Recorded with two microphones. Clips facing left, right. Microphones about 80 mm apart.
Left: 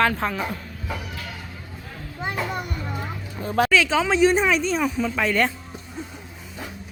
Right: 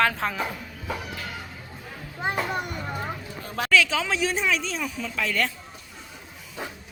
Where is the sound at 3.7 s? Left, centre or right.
Left.